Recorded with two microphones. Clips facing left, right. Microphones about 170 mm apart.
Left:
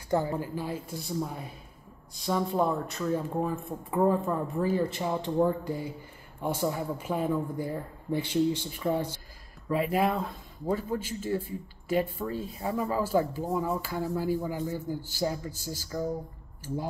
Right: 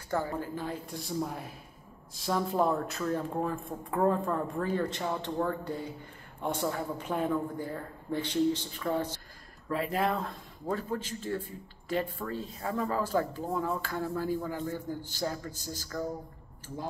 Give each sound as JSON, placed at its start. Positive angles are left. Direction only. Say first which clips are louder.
{"t": 0.1, "sound": "a woman's voice", "louder": "left 4 dB", "side_deg": 20}